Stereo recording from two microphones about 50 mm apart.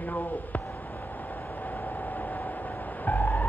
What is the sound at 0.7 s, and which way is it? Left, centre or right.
Vehicle, left.